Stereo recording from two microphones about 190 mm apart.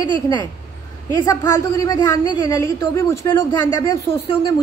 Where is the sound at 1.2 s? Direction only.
15° left (ahead or behind).